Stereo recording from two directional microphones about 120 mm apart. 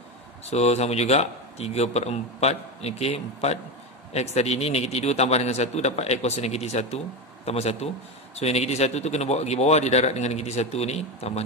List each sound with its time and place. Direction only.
0.5 s a man's voice: 65° left (ahead or behind)